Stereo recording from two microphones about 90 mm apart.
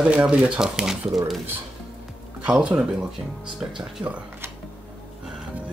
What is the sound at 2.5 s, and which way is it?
Speech, 15° right (ahead or behind).